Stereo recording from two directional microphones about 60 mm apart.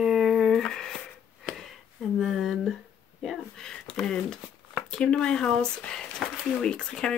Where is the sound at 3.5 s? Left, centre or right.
Centre.